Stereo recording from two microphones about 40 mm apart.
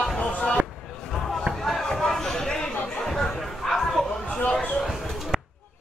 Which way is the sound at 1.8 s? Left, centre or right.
Centre.